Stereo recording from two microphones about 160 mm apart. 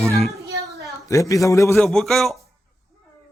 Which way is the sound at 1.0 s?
20° left (ahead or behind).